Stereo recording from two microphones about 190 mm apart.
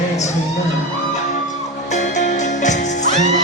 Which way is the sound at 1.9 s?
40° left (ahead or behind).